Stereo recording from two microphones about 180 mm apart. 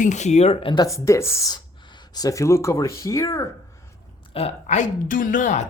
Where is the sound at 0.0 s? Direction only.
40° left (ahead or behind); by 3.4 s 20° left (ahead or behind).